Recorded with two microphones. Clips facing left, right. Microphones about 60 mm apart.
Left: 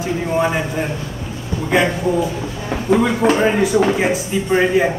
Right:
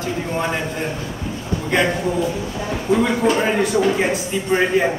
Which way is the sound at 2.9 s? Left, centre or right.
Left.